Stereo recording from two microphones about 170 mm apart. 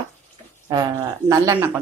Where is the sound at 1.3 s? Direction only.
20° right (ahead or behind).